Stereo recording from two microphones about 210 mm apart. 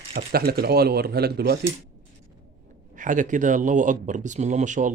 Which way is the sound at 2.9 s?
40° right (ahead or behind).